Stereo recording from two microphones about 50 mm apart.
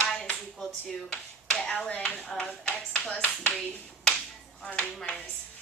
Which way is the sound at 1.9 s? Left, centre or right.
Left.